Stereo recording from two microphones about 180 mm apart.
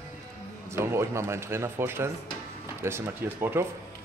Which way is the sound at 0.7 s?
15° right (ahead or behind).